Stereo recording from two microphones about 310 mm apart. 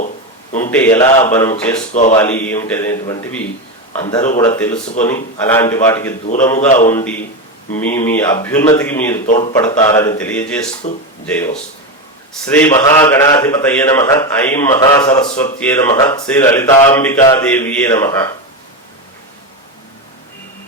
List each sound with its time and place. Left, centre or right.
0.6 s speech: centre
1.9 s a man's voice: left
2.1 s a man's voice: centre
9.2 s a man's voice: left
9.5 s speech: centre
10.8 s a man's voice: left
11.3 s a man's voice: centre